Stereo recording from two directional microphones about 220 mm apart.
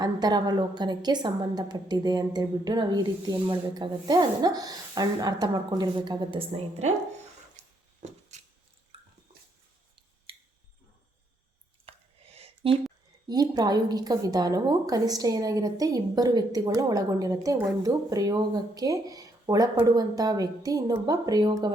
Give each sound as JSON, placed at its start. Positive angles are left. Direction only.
{"t": 0.0, "sound": "a woman's voice", "side_deg": -20}
{"t": 8.3, "sound": "squish", "side_deg": -30}
{"t": 11.9, "sound": "a sound", "side_deg": -30}
{"t": 13.2, "sound": "a woman's voice", "side_deg": -20}